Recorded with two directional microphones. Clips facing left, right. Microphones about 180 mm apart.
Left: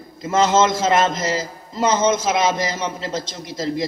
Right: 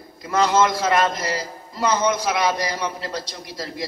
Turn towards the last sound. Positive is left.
turn(degrees=20)  # may be behind; listen again after turning